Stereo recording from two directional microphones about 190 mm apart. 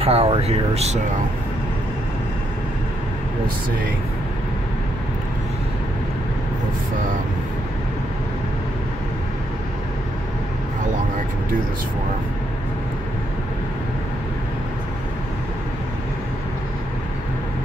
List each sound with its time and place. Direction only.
0.0 s speech: 30° right (ahead or behind)